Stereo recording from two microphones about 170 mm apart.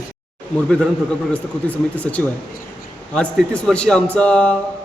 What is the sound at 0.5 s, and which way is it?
A man's voice, 5° left (ahead or behind).